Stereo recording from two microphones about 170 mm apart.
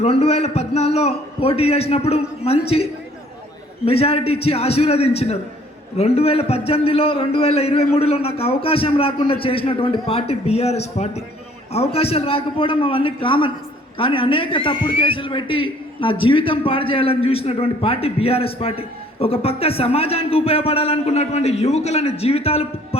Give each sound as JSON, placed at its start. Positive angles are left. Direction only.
{"t": 0.0, "sound": "a man's voice", "side_deg": 40}
{"t": 3.8, "sound": "a man's voice", "side_deg": 35}